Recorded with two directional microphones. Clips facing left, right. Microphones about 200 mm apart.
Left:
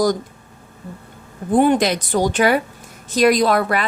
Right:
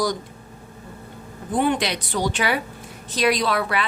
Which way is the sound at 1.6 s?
45° left (ahead or behind).